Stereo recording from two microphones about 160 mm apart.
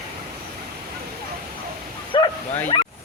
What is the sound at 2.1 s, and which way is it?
Bow-wow, 30° left (ahead or behind).